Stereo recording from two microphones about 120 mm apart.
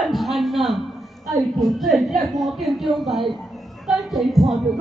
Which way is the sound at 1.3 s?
Centre (ahead or behind).